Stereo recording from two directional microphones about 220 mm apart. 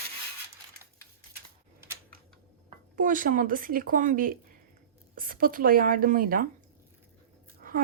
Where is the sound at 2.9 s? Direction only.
40° right (ahead or behind).